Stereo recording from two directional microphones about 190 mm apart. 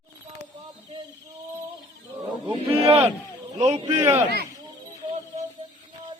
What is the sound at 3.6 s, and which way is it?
Speech, 35° right (ahead or behind).